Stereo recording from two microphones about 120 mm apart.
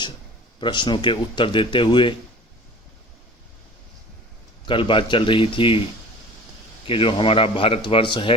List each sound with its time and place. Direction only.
0.6 s speech: 40° left (ahead or behind)
4.6 s a man's voice: 45° left (ahead or behind)
6.8 s a man's voice: 45° left (ahead or behind)